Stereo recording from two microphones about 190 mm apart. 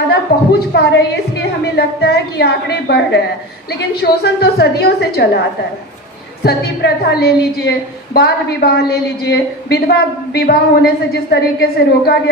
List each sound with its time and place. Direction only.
0.1 s a woman's voice: 60° left (ahead or behind)
6.4 s a woman's voice: 55° left (ahead or behind)